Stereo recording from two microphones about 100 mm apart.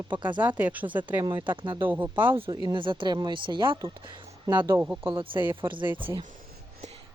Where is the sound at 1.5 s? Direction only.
55° right (ahead or behind).